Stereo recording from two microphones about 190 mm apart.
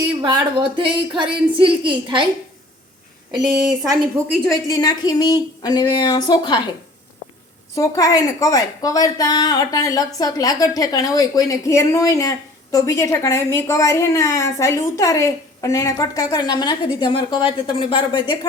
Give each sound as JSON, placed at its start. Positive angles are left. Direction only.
{"t": 0.2, "sound": "a woman's voice", "side_deg": -25}
{"t": 4.4, "sound": "a woman's voice", "side_deg": 20}
{"t": 7.8, "sound": "a woman's voice", "side_deg": 20}